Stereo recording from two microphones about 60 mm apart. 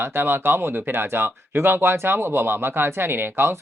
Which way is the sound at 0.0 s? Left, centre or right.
Right.